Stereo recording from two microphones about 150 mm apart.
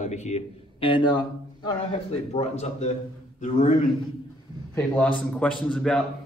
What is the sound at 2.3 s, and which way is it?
A man's voice, 45° left (ahead or behind).